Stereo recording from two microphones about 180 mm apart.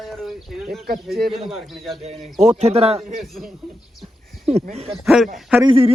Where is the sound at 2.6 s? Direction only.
35° right (ahead or behind).